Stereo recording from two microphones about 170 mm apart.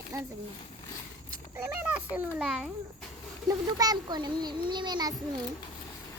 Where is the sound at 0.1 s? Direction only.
15° right (ahead or behind).